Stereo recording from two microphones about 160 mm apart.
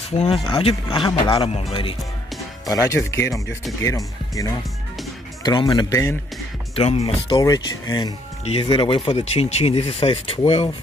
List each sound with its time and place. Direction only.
0.2 s speech: 35° left (ahead or behind)
2.7 s speech: 20° left (ahead or behind)
6.7 s speech: 40° left (ahead or behind)
7.3 s speech: 25° left (ahead or behind)